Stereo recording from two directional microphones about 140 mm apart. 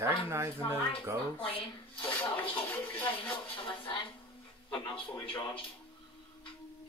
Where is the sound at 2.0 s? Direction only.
15° left (ahead or behind).